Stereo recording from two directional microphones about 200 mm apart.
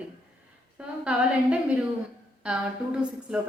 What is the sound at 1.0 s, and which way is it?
Speech, 5° right (ahead or behind).